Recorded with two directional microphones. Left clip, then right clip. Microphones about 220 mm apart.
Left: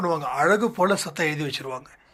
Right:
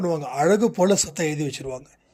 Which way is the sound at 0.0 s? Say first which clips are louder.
Even; 50° right (ahead or behind).